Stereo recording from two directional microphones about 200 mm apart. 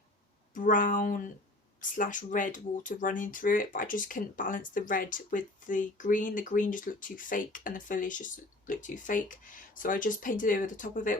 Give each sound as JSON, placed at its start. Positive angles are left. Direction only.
{"t": 0.5, "sound": "speech", "side_deg": 40}